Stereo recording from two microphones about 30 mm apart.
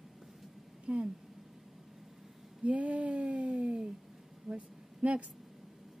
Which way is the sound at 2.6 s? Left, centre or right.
Right.